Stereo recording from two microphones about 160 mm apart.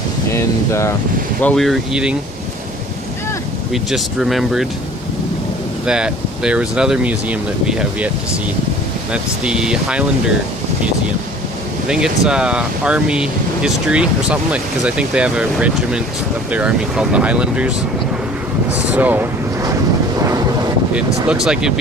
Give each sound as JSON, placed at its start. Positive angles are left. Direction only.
{"t": 0.3, "sound": "speech", "side_deg": 15}
{"t": 1.4, "sound": "speech", "side_deg": 5}
{"t": 3.7, "sound": "speech", "side_deg": 0}
{"t": 5.8, "sound": "speech", "side_deg": -5}
{"t": 9.1, "sound": "speech", "side_deg": -5}
{"t": 11.9, "sound": "speech", "side_deg": -5}
{"t": 18.7, "sound": "speech", "side_deg": -10}
{"t": 20.1, "sound": "vehicle", "side_deg": -20}
{"t": 20.9, "sound": "speech", "side_deg": -5}